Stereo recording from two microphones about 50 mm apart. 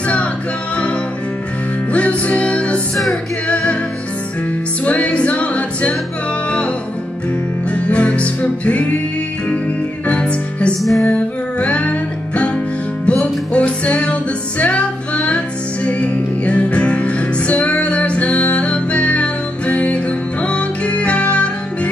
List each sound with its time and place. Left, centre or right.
1.9 s music: left
4.8 s music: left
7.7 s music: left
10.0 s music: left
10.8 s music: centre
11.1 s music: left